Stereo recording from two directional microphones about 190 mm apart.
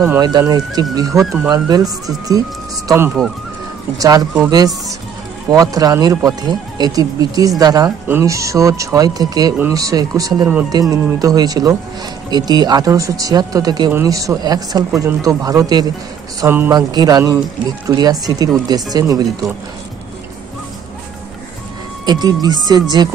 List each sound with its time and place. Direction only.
0.2 s speech: 20° right (ahead or behind)
4.0 s speech: 20° right (ahead or behind)
5.5 s speech: 20° right (ahead or behind)
22.0 s speech: 20° right (ahead or behind)